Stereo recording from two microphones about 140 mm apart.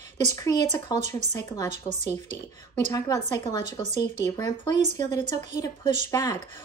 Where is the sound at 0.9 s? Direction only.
55° right (ahead or behind).